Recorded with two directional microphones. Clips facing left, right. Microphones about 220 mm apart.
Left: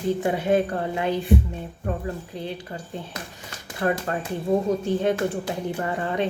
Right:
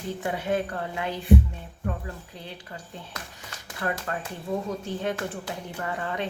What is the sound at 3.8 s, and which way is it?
Speech, 25° left (ahead or behind).